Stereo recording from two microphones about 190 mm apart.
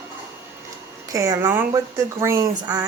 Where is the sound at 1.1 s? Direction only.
15° right (ahead or behind).